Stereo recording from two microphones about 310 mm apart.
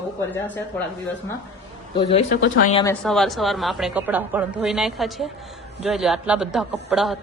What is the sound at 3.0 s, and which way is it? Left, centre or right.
A woman's voice, centre.